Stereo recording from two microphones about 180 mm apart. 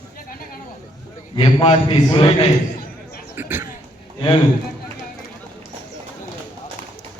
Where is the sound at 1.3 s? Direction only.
30° left (ahead or behind).